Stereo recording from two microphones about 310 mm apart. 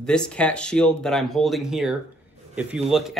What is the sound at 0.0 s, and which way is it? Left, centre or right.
Speech, centre.